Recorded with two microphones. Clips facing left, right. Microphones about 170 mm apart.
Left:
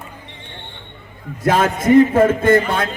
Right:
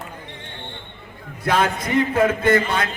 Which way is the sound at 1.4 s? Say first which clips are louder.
Left 5 dB; 45° left (ahead or behind).